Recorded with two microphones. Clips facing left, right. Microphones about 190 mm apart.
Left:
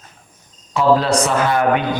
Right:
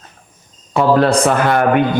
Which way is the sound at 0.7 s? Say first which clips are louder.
Right 2 dB; 55° right (ahead or behind).